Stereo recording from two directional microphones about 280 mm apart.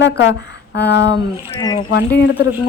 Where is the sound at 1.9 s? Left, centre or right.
Left.